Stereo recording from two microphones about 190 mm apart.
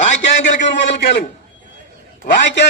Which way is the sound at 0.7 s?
65° left (ahead or behind).